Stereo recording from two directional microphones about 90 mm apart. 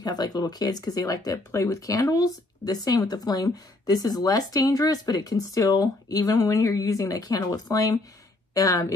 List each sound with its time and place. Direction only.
0.0 s a woman's voice: 45° left (ahead or behind)